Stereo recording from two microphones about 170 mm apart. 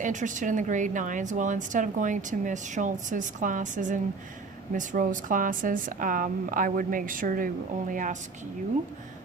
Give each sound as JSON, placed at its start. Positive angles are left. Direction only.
{"t": 0.0, "sound": "a woman's voice", "side_deg": -45}